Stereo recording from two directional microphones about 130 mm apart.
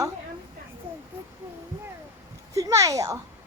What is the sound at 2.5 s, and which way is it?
Speech, 25° right (ahead or behind).